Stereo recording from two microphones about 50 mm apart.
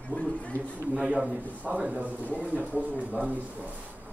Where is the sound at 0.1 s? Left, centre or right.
Left.